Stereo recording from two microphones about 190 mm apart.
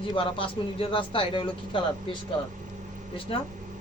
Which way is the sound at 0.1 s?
25° left (ahead or behind).